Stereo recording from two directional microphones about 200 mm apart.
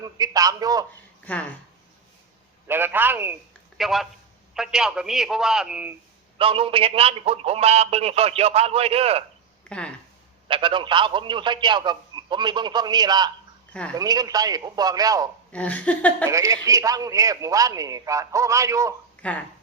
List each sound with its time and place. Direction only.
0.0 s a man's voice: 20° right (ahead or behind)
1.2 s speech: 5° left (ahead or behind)
2.6 s a man's voice: 10° right (ahead or behind)
6.4 s a man's voice: 25° right (ahead or behind)
9.6 s speech: 5° left (ahead or behind)
10.5 s a man's voice: 25° right (ahead or behind)
15.5 s laughter: 5° left (ahead or behind)
16.2 s a man's voice: 15° right (ahead or behind)
19.1 s a sound: 5° left (ahead or behind)